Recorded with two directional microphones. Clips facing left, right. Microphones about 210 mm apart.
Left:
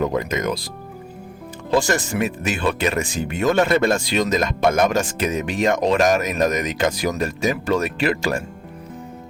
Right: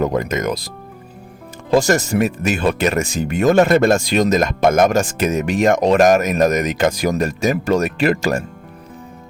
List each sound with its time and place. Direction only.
0.0 s speech: 45° right (ahead or behind)
1.7 s speech: 40° right (ahead or behind)